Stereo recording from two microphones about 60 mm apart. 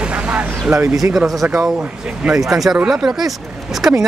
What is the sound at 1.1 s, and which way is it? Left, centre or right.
Speech, centre.